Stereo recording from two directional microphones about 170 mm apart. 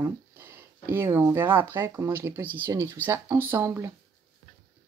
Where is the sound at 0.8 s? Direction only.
15° right (ahead or behind).